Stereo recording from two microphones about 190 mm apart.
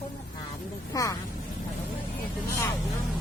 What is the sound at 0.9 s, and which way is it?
Speech, 20° left (ahead or behind).